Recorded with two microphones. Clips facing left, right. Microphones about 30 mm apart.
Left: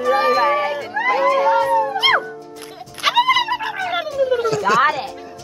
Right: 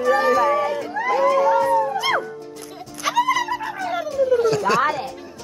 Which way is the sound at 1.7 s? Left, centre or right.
Left.